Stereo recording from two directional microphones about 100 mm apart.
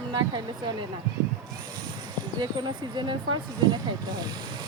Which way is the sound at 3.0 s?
50° right (ahead or behind).